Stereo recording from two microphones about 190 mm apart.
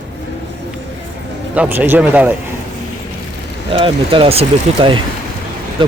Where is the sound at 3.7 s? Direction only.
25° right (ahead or behind).